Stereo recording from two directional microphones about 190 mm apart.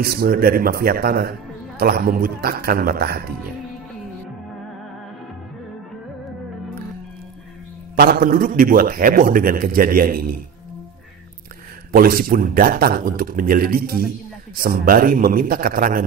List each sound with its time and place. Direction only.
0.0 s a man's voice: 50° right (ahead or behind)
7.9 s a man's voice: 50° right (ahead or behind)
11.9 s a man's voice: 50° right (ahead or behind)